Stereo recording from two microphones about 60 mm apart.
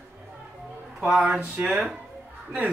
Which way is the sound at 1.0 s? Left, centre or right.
Centre.